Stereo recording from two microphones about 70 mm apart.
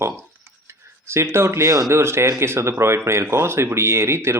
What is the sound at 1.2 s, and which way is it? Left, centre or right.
Speech, right.